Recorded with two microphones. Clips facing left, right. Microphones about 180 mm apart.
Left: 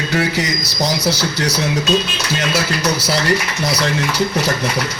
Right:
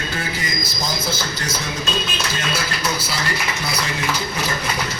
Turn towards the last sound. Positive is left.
turn(degrees=75)  # may be behind; listen again after turning